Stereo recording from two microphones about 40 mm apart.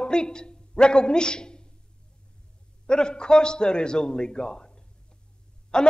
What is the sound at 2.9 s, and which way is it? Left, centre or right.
A man's voice, centre.